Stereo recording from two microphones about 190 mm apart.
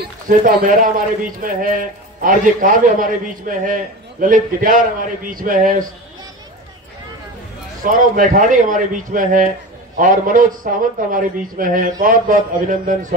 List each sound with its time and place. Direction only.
0.0 s a man's voice: 45° right (ahead or behind)
7.8 s a man's voice: 45° right (ahead or behind)